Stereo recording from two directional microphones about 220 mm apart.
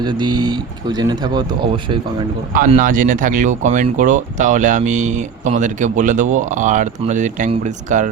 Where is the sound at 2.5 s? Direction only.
35° right (ahead or behind).